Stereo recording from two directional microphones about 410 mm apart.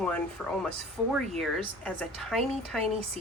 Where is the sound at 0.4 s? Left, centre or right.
Centre.